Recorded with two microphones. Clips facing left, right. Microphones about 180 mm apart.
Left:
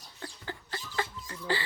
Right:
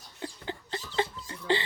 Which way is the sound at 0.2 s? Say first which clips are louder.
Right 4 dB; 20° right (ahead or behind).